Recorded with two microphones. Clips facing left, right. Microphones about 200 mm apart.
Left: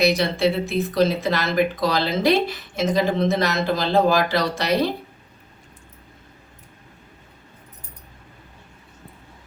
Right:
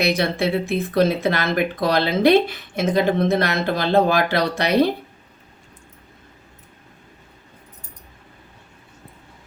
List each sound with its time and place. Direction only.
0.0 s speech: 55° right (ahead or behind)